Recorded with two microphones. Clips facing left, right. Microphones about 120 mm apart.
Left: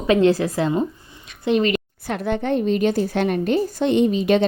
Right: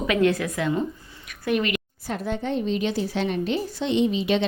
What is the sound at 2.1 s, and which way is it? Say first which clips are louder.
A woman's voice: left 5 dB; 65° left (ahead or behind).